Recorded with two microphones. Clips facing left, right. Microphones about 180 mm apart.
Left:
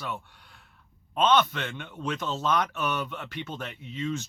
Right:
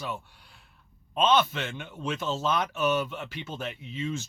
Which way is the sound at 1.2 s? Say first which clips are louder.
Left 1 dB; 10° right (ahead or behind).